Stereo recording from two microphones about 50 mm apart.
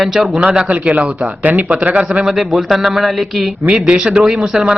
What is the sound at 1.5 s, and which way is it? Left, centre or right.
Speech, right.